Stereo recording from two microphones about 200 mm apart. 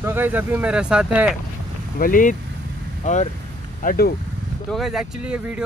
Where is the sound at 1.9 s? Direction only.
45° left (ahead or behind).